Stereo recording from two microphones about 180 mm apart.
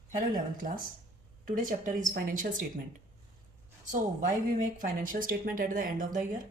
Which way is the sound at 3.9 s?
45° right (ahead or behind).